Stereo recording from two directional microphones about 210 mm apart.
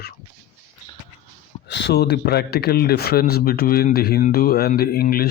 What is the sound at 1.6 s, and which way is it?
Speech, 55° left (ahead or behind).